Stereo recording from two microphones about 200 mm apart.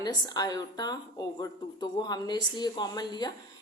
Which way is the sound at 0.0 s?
20° left (ahead or behind).